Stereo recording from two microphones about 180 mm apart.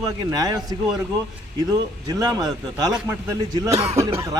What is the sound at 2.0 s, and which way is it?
A man's voice, 20° right (ahead or behind).